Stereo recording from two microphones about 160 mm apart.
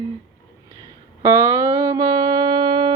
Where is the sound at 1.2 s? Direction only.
20° right (ahead or behind).